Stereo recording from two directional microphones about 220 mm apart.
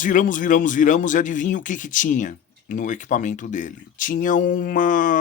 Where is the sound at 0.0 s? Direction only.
35° left (ahead or behind).